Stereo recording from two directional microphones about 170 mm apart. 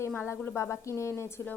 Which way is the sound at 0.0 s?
15° left (ahead or behind).